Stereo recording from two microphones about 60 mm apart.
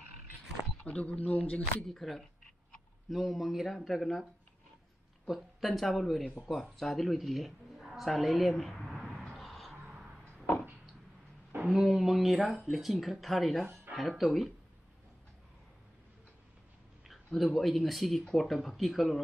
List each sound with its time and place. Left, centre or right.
0.8 s speech: left
1.8 s speech: centre
5.2 s speech: centre
9.4 s music: centre
11.7 s speech: centre
17.1 s speech: centre